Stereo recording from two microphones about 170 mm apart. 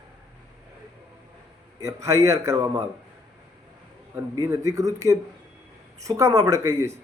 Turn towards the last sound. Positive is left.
turn(degrees=-20)  # may be behind; listen again after turning